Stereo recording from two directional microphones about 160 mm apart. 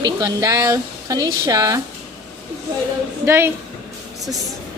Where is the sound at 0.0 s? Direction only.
25° right (ahead or behind).